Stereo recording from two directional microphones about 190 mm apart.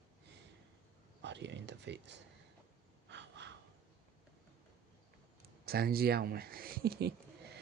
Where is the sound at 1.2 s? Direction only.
65° right (ahead or behind).